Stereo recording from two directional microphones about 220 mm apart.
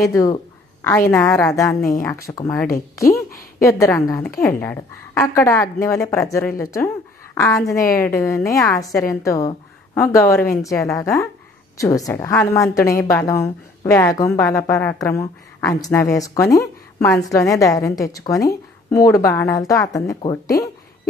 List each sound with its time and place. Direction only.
0.0 s a woman's voice: 15° left (ahead or behind)
3.1 s a sound: 40° left (ahead or behind)
3.6 s a woman's voice: 15° left (ahead or behind)